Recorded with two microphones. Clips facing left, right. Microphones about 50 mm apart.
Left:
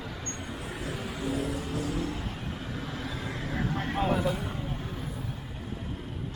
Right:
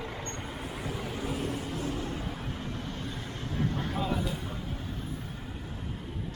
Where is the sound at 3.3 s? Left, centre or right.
Left.